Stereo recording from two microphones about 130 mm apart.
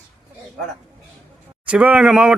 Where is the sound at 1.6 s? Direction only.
10° right (ahead or behind).